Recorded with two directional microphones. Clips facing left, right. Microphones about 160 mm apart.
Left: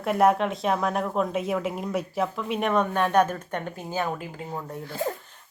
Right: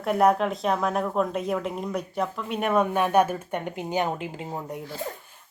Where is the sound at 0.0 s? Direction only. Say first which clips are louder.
Even; centre (ahead or behind); by 4.8 s 20° right (ahead or behind).